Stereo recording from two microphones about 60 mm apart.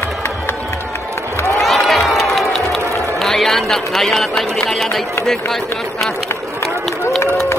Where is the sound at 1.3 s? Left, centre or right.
Left.